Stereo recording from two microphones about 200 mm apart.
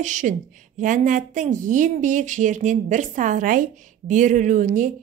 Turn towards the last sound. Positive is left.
turn(degrees=-40)  # may be behind; listen again after turning